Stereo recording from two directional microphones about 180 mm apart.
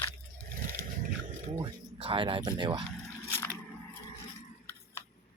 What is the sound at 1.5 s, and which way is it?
Speech, 25° right (ahead or behind).